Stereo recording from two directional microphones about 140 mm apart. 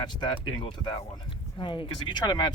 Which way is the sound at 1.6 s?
30° left (ahead or behind).